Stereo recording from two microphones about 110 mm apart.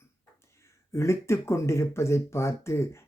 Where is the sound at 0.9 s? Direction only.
25° left (ahead or behind).